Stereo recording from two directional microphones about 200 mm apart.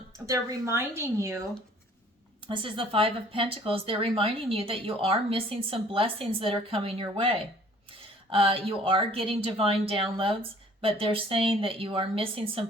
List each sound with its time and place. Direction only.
0.3 s speech: 15° right (ahead or behind)
2.5 s speech: 25° right (ahead or behind)